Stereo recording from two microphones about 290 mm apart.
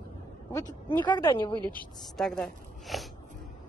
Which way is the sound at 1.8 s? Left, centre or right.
Centre.